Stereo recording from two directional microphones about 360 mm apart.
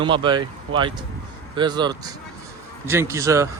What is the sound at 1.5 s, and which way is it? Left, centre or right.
Speech, centre.